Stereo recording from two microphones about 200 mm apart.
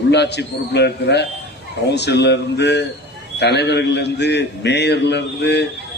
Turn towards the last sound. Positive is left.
turn(degrees=60)  # may be behind; listen again after turning